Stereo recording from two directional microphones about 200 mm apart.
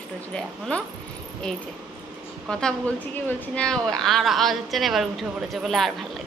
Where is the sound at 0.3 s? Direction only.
5° left (ahead or behind).